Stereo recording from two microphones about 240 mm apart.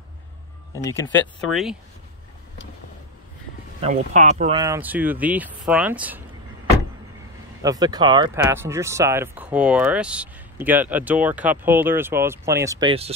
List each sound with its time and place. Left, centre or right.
0.8 s speech: centre
3.8 s speech: right
4.6 s speech: centre
7.6 s speech: centre